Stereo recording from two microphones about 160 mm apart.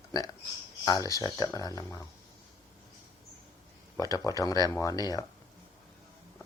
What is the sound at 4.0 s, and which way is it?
Speech, 20° left (ahead or behind).